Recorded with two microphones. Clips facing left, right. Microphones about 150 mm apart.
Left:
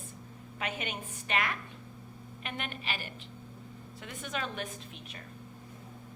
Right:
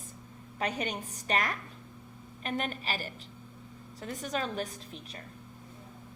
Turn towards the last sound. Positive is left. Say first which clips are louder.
# right 1 dB
turn(degrees=-35)  # may be behind; listen again after turning